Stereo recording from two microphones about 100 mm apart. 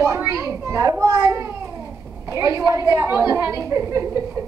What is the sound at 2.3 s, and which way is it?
A woman's voice, 35° right (ahead or behind).